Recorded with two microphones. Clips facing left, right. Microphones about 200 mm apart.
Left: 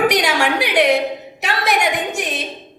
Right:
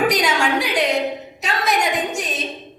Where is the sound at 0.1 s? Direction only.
70° left (ahead or behind).